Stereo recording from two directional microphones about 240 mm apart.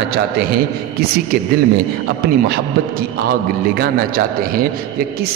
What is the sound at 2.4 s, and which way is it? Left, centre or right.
A man's voice, right.